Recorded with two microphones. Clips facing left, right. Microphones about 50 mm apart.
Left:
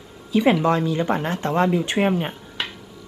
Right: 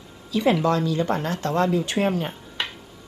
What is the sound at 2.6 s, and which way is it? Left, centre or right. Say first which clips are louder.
Music: even; centre.